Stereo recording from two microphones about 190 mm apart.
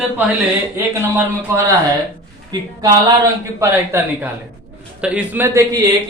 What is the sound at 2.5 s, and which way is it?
A man's voice, 20° right (ahead or behind).